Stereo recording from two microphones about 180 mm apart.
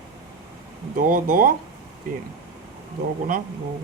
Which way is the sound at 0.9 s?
50° right (ahead or behind).